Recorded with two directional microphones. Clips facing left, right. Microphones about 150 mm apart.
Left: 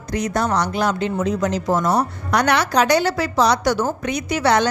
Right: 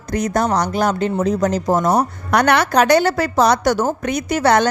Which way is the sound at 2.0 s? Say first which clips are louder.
Right 3 dB; 55° right (ahead or behind).